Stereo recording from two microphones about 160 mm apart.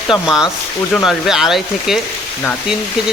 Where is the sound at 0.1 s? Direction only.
5° right (ahead or behind).